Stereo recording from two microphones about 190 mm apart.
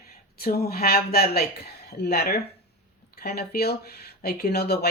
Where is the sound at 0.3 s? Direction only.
55° left (ahead or behind).